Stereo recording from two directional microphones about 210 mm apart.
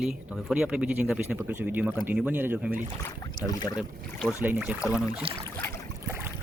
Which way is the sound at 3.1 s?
15° left (ahead or behind).